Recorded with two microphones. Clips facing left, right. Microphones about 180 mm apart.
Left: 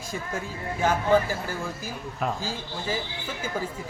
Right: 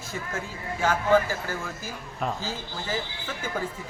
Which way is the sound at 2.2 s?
5° left (ahead or behind).